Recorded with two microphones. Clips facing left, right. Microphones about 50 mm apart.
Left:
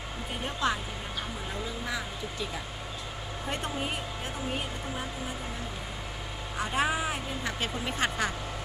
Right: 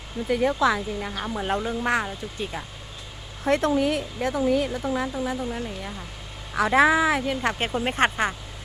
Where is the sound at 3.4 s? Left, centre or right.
Right.